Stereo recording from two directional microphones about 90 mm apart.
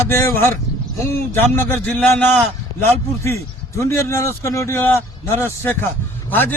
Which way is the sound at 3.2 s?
35° left (ahead or behind).